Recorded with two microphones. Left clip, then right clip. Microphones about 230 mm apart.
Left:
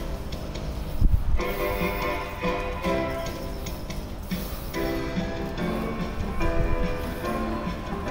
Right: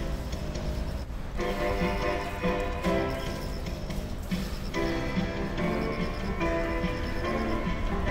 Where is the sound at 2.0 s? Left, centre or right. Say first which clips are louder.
Left 2 dB; left.